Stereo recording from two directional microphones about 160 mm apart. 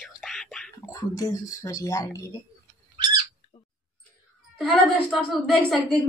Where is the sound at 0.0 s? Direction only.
Centre (ahead or behind).